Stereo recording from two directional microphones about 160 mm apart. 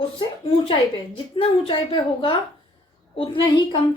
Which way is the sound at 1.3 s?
30° left (ahead or behind).